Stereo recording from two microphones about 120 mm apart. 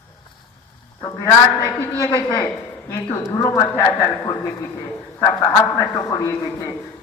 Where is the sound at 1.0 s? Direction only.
25° left (ahead or behind).